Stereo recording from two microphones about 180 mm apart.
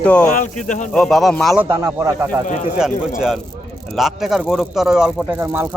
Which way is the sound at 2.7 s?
5° right (ahead or behind).